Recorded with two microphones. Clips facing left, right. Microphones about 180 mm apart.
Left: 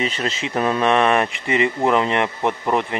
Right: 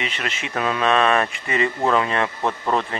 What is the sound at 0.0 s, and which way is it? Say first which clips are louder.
Speech: left 5 dB; 35° left (ahead or behind).